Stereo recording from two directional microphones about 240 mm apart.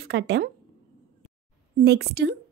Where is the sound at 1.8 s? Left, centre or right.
Right.